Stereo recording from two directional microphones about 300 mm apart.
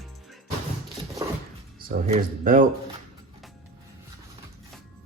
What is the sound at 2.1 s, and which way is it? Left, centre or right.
Speech, right.